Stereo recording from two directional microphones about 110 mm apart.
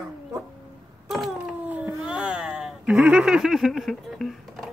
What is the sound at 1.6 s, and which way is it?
Cat, 15° right (ahead or behind).